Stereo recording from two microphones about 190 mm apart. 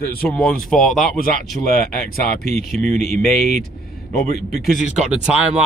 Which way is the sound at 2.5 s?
Centre (ahead or behind).